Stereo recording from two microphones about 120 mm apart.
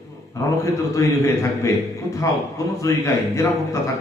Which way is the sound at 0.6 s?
25° left (ahead or behind).